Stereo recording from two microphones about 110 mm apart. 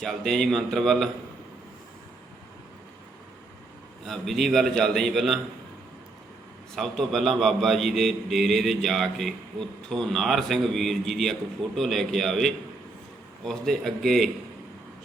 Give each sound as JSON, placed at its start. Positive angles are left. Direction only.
{"t": 0.0, "sound": "a man's voice", "side_deg": 5}
{"t": 4.0, "sound": "a man's voice", "side_deg": 5}
{"t": 6.7, "sound": "a man's voice", "side_deg": 5}